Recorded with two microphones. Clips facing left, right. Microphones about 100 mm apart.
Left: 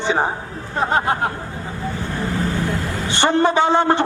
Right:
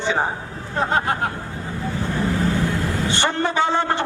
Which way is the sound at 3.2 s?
20° left (ahead or behind).